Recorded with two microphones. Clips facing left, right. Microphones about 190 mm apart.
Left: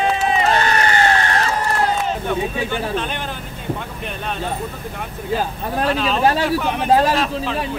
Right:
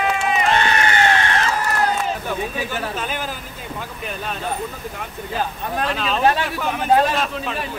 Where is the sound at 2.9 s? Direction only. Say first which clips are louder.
Left 3 dB; 5° right (ahead or behind).